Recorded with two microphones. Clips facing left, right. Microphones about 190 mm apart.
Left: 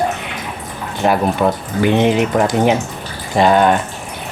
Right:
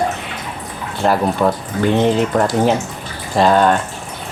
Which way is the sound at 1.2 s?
10° left (ahead or behind).